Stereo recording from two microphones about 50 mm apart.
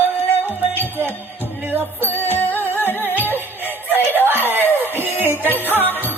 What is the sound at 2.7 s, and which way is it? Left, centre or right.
Music, left.